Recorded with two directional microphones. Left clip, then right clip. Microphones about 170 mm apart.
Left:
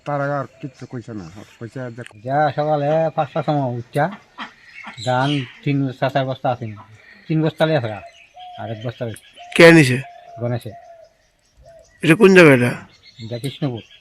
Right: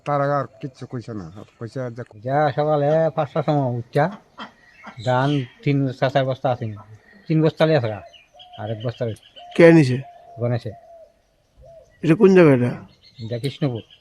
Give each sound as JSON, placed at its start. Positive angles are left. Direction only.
{"t": 0.0, "sound": "speech", "side_deg": -20}
{"t": 9.5, "sound": "speech", "side_deg": 0}
{"t": 10.4, "sound": "speech", "side_deg": -30}
{"t": 11.9, "sound": "speech", "side_deg": 0}
{"t": 13.3, "sound": "speech", "side_deg": -30}